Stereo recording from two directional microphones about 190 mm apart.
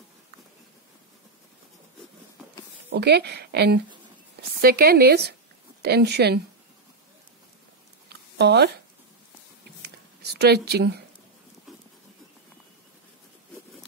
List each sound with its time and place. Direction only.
2.9 s speech: 60° right (ahead or behind)
8.4 s speech: 60° right (ahead or behind)
9.8 s a sound: 60° right (ahead or behind)